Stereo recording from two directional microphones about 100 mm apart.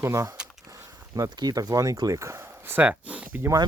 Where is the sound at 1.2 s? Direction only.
40° right (ahead or behind); by 3.4 s 15° right (ahead or behind).